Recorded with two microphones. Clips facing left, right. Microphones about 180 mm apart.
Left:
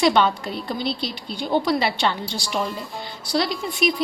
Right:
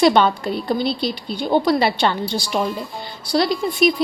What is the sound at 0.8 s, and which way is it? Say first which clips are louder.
Speech: right 5 dB; 10° right (ahead or behind).